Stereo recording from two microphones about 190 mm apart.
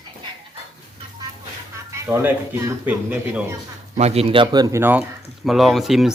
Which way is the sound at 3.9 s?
35° right (ahead or behind).